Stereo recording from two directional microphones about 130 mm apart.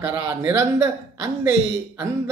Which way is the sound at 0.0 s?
25° right (ahead or behind).